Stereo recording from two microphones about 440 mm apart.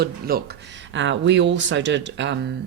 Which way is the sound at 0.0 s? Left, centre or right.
Right.